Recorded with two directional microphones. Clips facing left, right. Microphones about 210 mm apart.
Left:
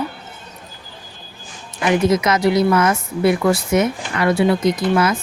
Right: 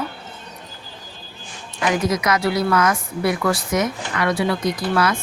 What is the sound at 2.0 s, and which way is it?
A woman's voice, 25° left (ahead or behind).